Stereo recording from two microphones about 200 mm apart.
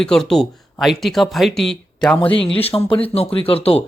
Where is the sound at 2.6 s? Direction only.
25° left (ahead or behind).